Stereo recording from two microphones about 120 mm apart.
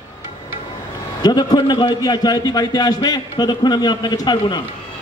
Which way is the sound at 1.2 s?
35° left (ahead or behind).